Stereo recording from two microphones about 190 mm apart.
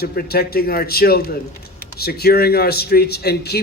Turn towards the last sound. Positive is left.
turn(degrees=60)  # may be behind; listen again after turning